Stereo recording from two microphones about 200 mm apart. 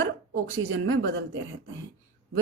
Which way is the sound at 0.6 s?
80° right.